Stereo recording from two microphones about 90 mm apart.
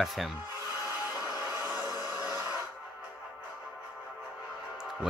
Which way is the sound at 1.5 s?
20° right (ahead or behind).